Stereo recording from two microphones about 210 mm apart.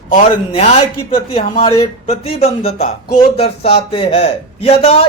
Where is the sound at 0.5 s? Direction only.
30° left (ahead or behind).